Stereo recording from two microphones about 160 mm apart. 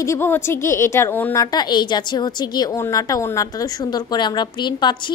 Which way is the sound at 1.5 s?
25° left (ahead or behind).